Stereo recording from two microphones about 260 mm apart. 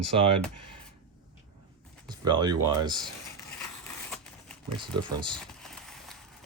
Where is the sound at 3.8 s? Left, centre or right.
Centre.